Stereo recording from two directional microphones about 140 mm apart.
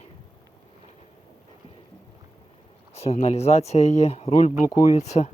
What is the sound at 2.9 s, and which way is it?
Speech, 50° left (ahead or behind).